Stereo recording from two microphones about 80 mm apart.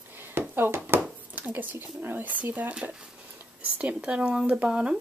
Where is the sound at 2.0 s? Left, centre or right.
Right.